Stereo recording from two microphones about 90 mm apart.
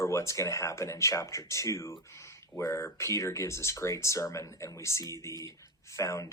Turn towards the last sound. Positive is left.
turn(degrees=35)  # may be behind; listen again after turning